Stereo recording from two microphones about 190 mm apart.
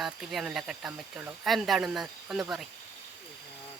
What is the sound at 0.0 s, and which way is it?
Speech, centre (ahead or behind).